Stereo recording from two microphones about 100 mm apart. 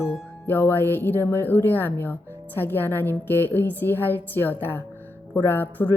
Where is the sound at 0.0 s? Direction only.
20° left (ahead or behind).